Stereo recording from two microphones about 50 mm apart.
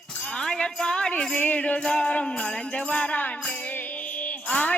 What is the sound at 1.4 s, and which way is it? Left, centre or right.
Music, left.